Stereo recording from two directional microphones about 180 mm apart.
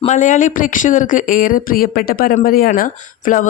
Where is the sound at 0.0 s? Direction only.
40° left (ahead or behind).